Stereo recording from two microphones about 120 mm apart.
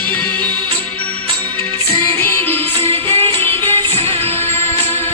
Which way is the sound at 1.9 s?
25° left (ahead or behind).